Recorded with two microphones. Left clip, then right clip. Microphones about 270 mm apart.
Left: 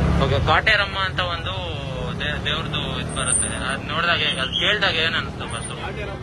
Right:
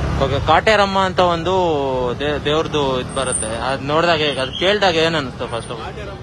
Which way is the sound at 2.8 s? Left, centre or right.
Right.